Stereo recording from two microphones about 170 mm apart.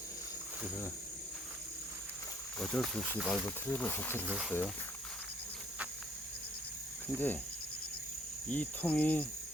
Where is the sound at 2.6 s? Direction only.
Centre (ahead or behind).